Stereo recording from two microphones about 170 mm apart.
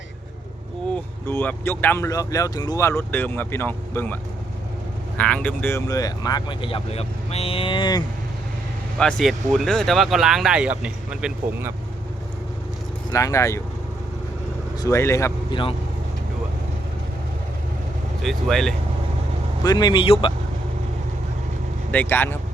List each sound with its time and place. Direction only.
0.9 s speech: 10° left (ahead or behind); by 8.0 s 25° left (ahead or behind)
9.0 s speech: 5° left (ahead or behind)
13.1 s speech: 20° left (ahead or behind)
14.8 s speech: 15° left (ahead or behind)
18.2 s speech: centre (ahead or behind)
19.6 s speech: 25° left (ahead or behind)
21.9 s speech: 10° left (ahead or behind)